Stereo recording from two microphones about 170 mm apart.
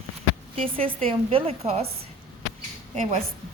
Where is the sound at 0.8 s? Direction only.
35° right (ahead or behind).